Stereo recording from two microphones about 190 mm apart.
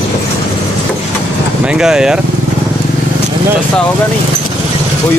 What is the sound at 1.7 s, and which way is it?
Speech, 5° right (ahead or behind).